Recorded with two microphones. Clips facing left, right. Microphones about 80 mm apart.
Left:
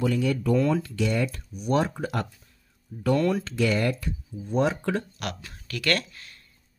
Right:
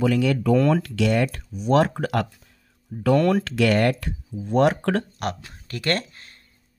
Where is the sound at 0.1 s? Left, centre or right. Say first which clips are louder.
Right 4 dB; right.